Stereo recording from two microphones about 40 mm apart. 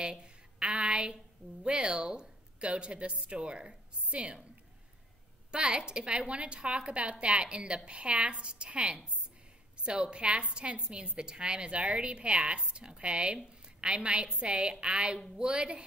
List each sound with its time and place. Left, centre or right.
0.0 s a sound: right
1.6 s a woman's voice: right
5.5 s a woman's voice: right